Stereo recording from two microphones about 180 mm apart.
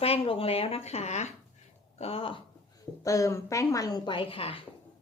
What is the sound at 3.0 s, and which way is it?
A woman's voice, 20° left (ahead or behind).